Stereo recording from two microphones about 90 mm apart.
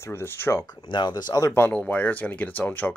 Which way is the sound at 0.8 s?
55° left (ahead or behind).